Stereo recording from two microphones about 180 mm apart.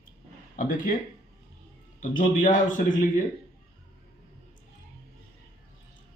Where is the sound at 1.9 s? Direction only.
45° left (ahead or behind).